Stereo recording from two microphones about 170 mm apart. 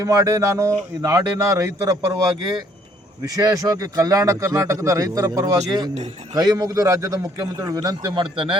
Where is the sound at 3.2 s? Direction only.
20° right (ahead or behind).